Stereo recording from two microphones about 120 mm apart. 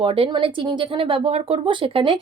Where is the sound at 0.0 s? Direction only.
45° right (ahead or behind).